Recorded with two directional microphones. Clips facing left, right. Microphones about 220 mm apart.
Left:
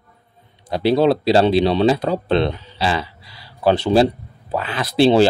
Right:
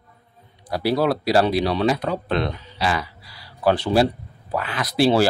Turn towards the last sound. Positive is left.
turn(degrees=25)  # may be behind; listen again after turning